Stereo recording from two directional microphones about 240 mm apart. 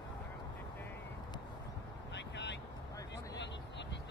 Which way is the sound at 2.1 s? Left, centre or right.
Left.